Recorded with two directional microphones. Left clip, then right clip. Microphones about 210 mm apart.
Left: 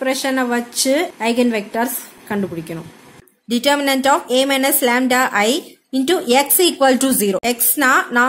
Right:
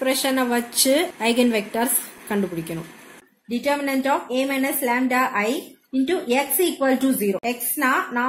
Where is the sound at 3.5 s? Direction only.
45° left (ahead or behind).